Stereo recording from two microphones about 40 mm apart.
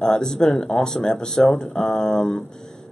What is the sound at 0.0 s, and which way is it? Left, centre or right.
Speech, centre.